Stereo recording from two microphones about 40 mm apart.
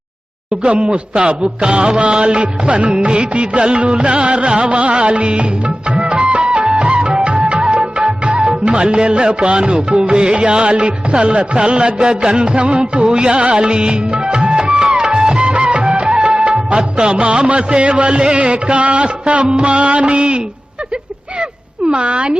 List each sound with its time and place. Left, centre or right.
0.5 s music: right
21.8 s music: right